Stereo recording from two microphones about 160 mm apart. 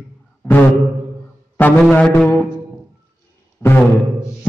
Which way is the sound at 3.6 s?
15° left (ahead or behind).